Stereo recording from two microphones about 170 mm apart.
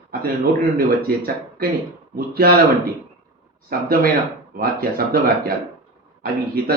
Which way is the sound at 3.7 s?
60° right (ahead or behind).